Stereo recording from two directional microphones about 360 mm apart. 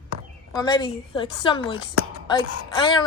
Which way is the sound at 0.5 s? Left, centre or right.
Centre.